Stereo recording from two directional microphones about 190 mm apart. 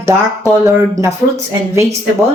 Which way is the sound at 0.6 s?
15° right (ahead or behind).